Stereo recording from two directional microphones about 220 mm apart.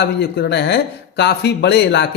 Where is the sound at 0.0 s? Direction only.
45° left (ahead or behind).